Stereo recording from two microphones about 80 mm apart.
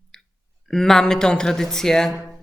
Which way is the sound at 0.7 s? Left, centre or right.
Centre.